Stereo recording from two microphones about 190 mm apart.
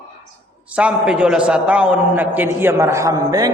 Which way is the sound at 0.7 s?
5° right (ahead or behind).